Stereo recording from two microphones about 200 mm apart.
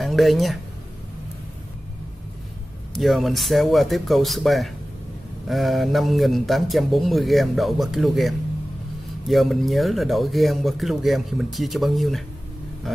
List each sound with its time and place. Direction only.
0.0 s speech: centre (ahead or behind)
3.0 s speech: centre (ahead or behind)